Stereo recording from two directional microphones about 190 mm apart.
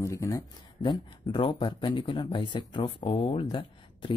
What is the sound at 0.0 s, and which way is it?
A man's voice, 15° left (ahead or behind).